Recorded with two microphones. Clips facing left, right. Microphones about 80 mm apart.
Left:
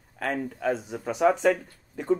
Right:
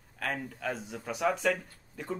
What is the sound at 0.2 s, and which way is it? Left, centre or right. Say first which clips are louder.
Speech: left 6 dB; left.